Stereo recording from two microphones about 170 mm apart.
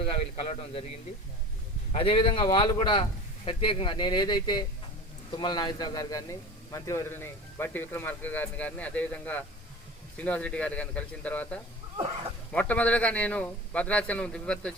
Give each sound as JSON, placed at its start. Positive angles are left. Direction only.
{"t": 0.2, "sound": "a man's voice", "side_deg": 35}
{"t": 1.9, "sound": "a man's voice", "side_deg": 30}